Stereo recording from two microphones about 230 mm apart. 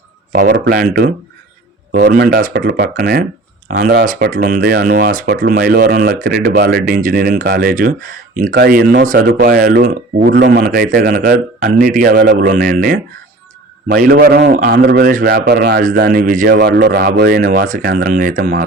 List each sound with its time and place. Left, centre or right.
0.5 s a man's voice: right